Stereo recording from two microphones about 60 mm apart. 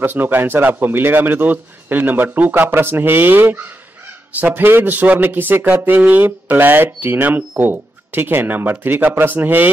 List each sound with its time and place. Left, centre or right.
0.0 s speech: right